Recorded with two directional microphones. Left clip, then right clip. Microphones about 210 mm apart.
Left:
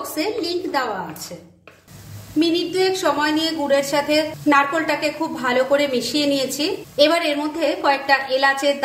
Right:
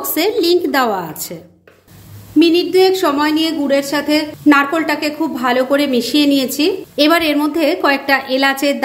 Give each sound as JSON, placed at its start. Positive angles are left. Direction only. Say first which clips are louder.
{"t": 0.1, "sound": "a woman's voice", "louder": "right 11 dB", "side_deg": -55}
{"t": 2.3, "sound": "a woman's voice", "louder": "right 8 dB", "side_deg": -35}